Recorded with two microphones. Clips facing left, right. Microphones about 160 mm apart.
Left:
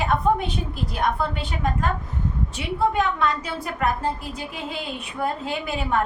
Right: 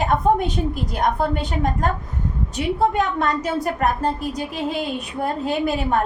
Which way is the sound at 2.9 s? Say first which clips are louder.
Right 2 dB; 45° right (ahead or behind).